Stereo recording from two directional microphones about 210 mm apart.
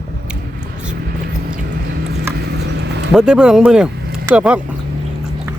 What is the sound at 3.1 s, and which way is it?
A man's voice, 5° right (ahead or behind).